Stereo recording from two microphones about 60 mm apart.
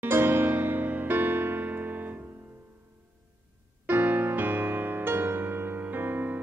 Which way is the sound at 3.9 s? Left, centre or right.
Right.